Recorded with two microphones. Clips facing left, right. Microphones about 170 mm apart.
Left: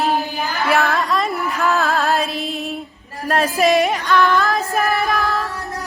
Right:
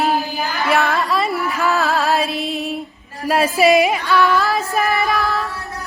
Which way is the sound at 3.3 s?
5° right (ahead or behind).